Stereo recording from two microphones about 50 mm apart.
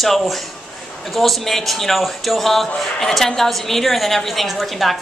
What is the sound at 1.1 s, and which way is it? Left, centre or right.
Speech, centre.